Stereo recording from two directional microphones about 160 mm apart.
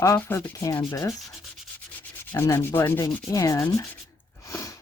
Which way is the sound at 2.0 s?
15° left (ahead or behind).